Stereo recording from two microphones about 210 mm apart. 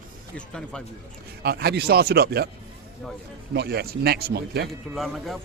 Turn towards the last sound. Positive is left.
turn(degrees=0)  # may be behind; listen again after turning